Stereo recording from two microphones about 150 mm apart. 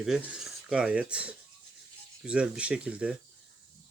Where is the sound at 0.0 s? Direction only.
5° right (ahead or behind).